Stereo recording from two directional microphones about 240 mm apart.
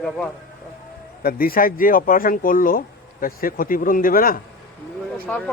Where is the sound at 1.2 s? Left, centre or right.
Left.